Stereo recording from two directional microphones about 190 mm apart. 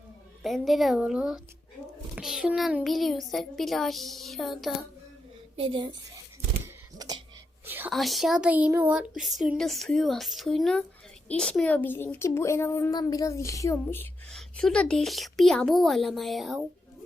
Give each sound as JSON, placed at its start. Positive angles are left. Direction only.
{"t": 0.4, "sound": "a woman's voice", "side_deg": 0}
{"t": 5.5, "sound": "speech", "side_deg": -25}
{"t": 7.0, "sound": "a sound", "side_deg": -20}
{"t": 7.6, "sound": "whispering", "side_deg": -10}
{"t": 7.9, "sound": "a woman's voice", "side_deg": 0}